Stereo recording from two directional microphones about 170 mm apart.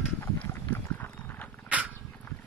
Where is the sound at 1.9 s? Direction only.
10° left (ahead or behind).